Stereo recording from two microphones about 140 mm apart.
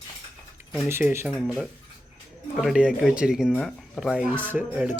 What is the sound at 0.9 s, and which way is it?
Speech, 15° right (ahead or behind).